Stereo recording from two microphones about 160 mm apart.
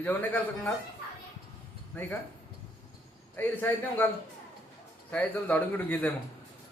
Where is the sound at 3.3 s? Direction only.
15° left (ahead or behind).